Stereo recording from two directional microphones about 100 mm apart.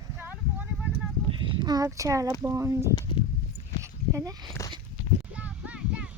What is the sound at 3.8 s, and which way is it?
Dog, 35° right (ahead or behind).